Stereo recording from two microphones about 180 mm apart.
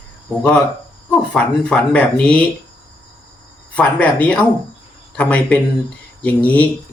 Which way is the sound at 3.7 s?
5° left (ahead or behind).